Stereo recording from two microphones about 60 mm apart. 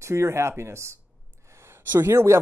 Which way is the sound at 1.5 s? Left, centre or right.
Right.